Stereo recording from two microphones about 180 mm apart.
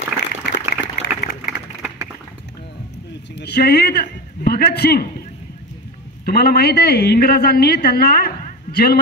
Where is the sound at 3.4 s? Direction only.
65° left (ahead or behind).